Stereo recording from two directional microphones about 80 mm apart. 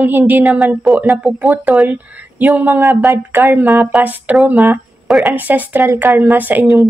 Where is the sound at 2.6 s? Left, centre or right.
Right.